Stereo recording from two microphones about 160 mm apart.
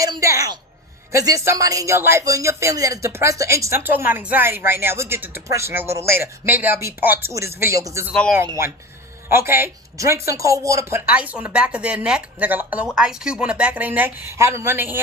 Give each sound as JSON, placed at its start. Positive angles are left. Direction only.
{"t": 0.0, "sound": "speech", "side_deg": -20}
{"t": 8.1, "sound": "speech", "side_deg": 5}
{"t": 8.4, "sound": "speech", "side_deg": -20}